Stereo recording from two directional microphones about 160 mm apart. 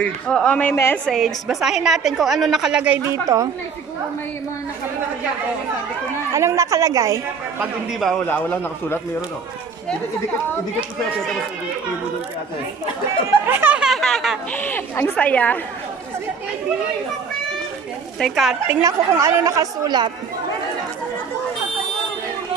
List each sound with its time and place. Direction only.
0.0 s speech: 5° left (ahead or behind)
1.0 s a woman's voice: centre (ahead or behind)
3.0 s a woman's voice: 20° right (ahead or behind)
6.3 s a woman's voice: 20° right (ahead or behind)
8.3 s speech: 15° left (ahead or behind)
13.5 s a sound: 10° right (ahead or behind)
14.5 s speech: 10° left (ahead or behind)
18.2 s a woman's voice: centre (ahead or behind)
18.7 s a woman's voice: 20° right (ahead or behind)